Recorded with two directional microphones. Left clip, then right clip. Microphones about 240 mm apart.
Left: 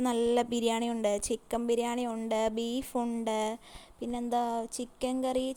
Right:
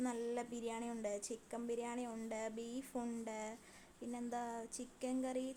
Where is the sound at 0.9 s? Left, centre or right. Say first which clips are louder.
Left 13 dB; left.